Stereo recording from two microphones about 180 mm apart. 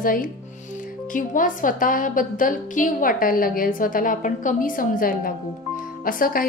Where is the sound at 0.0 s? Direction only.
50° left (ahead or behind).